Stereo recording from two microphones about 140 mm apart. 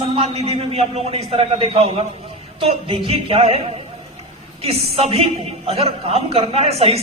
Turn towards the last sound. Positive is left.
turn(degrees=-45)  # may be behind; listen again after turning